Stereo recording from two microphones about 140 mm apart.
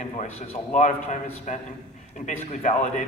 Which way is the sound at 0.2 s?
50° left (ahead or behind).